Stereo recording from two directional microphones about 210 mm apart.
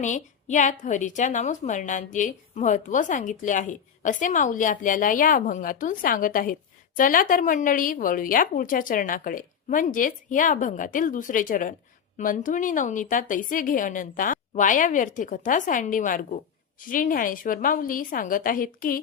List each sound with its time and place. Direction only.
0.0 s a woman's voice: 35° left (ahead or behind)